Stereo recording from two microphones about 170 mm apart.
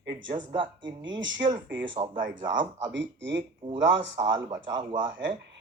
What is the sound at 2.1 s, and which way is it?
Speech, 90° right.